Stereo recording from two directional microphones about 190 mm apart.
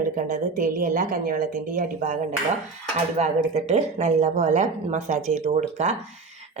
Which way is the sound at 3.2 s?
35° right (ahead or behind).